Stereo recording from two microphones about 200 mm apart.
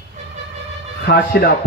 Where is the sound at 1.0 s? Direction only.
50° left (ahead or behind).